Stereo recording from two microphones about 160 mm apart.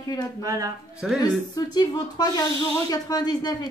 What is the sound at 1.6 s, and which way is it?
Speech, 25° left (ahead or behind).